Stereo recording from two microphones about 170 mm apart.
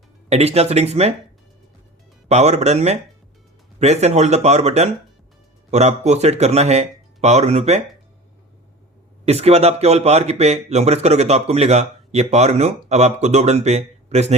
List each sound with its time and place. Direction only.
0.3 s speech: 40° right (ahead or behind)
2.3 s speech: 40° right (ahead or behind)
9.2 s speech: 35° right (ahead or behind)